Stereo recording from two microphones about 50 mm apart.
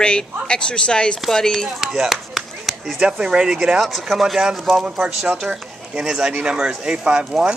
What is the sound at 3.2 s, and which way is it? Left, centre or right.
Speech, centre.